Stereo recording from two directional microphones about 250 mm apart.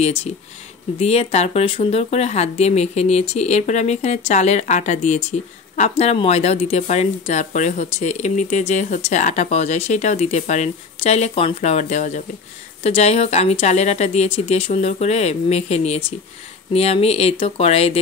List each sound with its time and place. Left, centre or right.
0.0 s speech: left